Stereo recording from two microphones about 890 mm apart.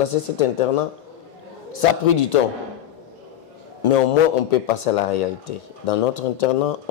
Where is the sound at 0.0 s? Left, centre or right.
Left.